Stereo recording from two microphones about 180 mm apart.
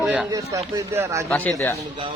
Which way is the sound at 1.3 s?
10° left (ahead or behind).